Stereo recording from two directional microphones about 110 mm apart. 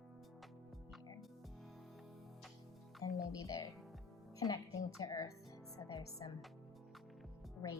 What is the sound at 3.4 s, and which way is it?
A woman's voice, 30° left (ahead or behind).